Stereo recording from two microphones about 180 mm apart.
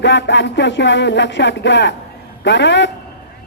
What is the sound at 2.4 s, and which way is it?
Speech, 80° left.